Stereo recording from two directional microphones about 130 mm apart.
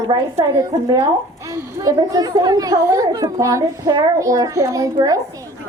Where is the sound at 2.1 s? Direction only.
30° right (ahead or behind).